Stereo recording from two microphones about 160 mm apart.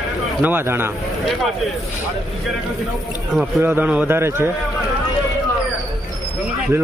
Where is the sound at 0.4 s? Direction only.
15° right (ahead or behind).